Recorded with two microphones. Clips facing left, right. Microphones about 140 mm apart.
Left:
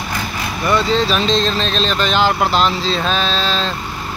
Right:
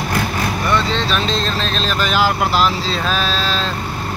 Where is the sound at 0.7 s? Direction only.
5° left (ahead or behind).